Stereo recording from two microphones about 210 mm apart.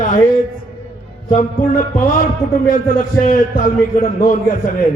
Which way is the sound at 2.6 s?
40° left (ahead or behind).